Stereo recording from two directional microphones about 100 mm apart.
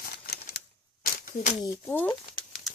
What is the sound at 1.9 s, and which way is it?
Speech, 20° left (ahead or behind).